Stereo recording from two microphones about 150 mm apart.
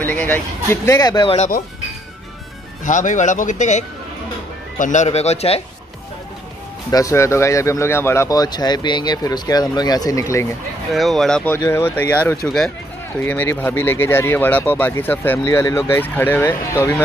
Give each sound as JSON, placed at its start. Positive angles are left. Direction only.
{"t": 0.0, "sound": "speech", "side_deg": 10}
{"t": 2.8, "sound": "speech", "side_deg": 60}
{"t": 6.9, "sound": "speech", "side_deg": 20}
{"t": 10.9, "sound": "speech", "side_deg": 0}
{"t": 11.5, "sound": "speech", "side_deg": 15}